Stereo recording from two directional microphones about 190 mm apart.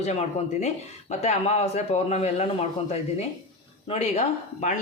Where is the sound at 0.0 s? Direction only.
35° left (ahead or behind).